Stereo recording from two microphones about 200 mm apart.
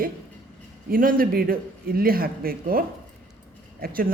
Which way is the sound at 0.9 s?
45° right (ahead or behind).